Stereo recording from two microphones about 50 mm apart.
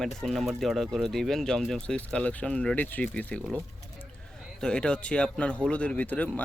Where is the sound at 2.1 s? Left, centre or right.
Left.